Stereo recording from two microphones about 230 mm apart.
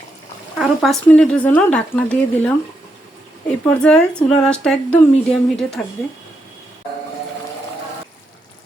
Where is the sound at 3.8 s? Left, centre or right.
Centre.